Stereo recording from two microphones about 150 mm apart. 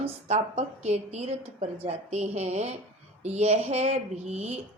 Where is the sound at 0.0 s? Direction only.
45° right (ahead or behind).